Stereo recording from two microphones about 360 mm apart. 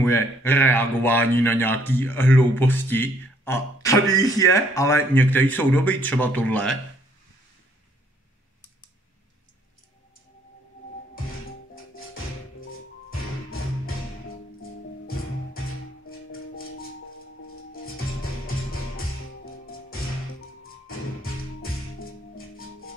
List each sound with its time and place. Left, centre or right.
0.0 s speech: centre
11.7 s music: left
15.0 s music: left
19.7 s music: left